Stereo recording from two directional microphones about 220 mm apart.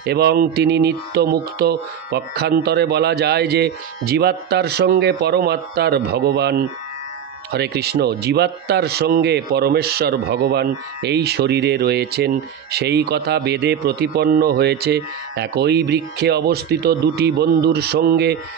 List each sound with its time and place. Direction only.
0.0 s speech: 45° right (ahead or behind)